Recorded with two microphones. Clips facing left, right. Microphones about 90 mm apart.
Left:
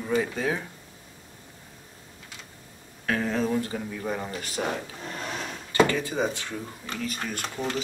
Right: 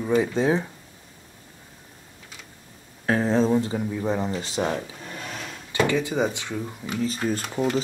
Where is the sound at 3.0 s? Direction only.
30° right (ahead or behind).